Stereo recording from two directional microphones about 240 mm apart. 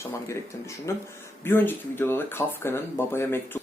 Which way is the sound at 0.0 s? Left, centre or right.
Centre.